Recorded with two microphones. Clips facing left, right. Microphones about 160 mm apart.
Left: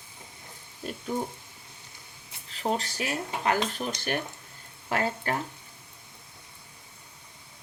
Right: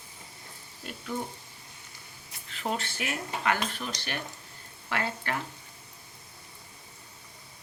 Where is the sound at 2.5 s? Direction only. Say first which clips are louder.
Left 3 dB; 35° left (ahead or behind).